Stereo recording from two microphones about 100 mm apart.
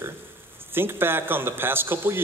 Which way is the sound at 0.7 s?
20° right (ahead or behind).